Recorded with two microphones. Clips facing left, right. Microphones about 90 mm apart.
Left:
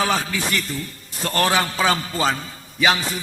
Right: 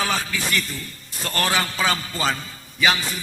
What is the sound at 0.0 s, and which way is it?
Music, 30° left (ahead or behind).